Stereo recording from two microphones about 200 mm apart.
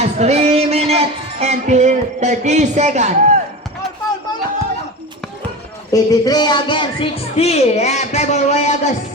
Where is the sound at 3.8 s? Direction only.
Centre (ahead or behind).